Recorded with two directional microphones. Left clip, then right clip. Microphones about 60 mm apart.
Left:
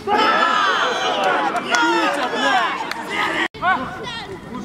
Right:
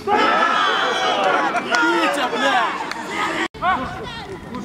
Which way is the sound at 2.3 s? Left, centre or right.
Left.